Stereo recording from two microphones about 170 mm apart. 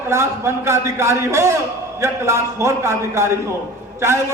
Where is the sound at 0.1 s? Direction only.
15° right (ahead or behind).